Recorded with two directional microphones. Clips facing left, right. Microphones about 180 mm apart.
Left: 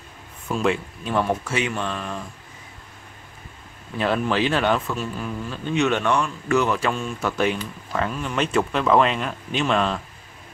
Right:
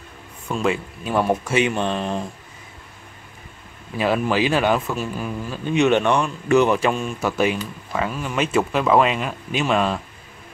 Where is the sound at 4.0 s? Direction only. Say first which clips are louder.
Right 2 dB; 10° right (ahead or behind).